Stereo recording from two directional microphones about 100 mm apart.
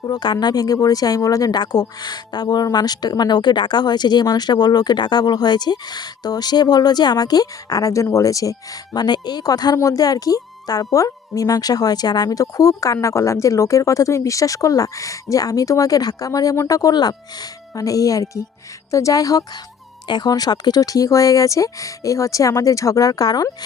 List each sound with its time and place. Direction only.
0.0 s speech: 45° left (ahead or behind)